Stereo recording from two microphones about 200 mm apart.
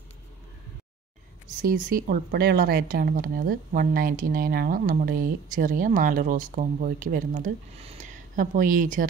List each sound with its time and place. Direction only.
1.6 s a woman's voice: 45° right (ahead or behind)